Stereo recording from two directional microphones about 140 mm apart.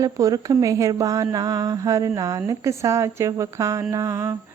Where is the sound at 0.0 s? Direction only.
25° right (ahead or behind).